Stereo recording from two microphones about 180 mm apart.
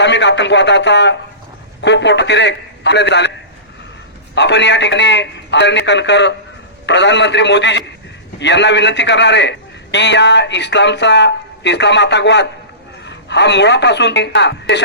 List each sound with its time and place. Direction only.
0.0 s a man's voice: 75° left (ahead or behind)
4.4 s a man's voice: 75° left (ahead or behind)